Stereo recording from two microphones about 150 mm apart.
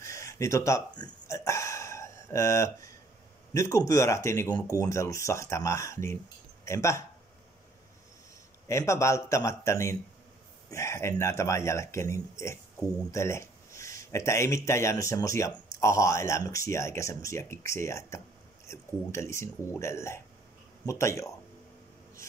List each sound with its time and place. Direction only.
0.0 s a sound: 20° left (ahead or behind)
3.5 s speech: 20° left (ahead or behind)
8.6 s speech: 20° left (ahead or behind)